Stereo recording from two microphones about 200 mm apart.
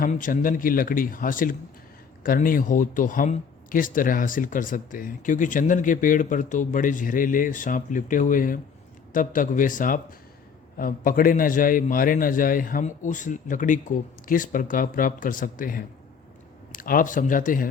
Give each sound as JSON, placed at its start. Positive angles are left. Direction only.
{"t": 0.0, "sound": "a man's voice", "side_deg": 40}